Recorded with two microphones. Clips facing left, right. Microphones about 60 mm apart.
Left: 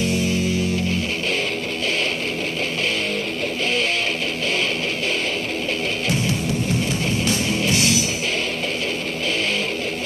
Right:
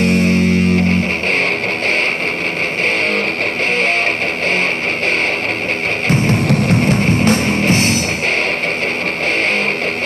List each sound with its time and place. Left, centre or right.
0.0 s music: right
6.0 s music: right